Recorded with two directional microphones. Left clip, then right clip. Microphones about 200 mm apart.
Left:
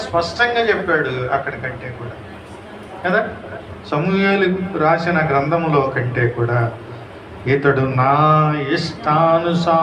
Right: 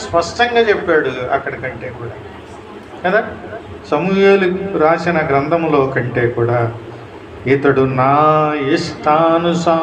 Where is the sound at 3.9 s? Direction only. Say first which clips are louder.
Right 6 dB; 35° right (ahead or behind).